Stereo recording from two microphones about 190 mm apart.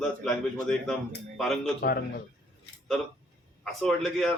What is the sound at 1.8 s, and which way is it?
Speech, 55° left (ahead or behind).